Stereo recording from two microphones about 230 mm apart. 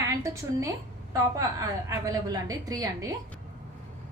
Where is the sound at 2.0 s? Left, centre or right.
Centre.